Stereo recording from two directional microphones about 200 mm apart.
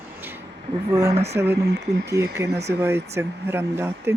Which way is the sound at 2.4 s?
55° right (ahead or behind).